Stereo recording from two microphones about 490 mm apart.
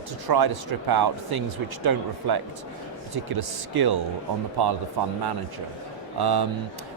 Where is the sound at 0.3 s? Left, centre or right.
Right.